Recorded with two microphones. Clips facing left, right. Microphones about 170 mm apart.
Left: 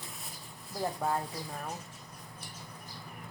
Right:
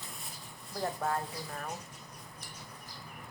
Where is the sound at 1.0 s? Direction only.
15° left (ahead or behind).